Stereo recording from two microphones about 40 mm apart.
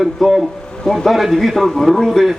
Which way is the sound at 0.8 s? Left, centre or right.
Centre.